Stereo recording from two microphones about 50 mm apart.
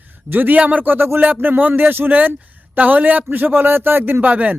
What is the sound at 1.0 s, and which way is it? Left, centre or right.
Speech, right.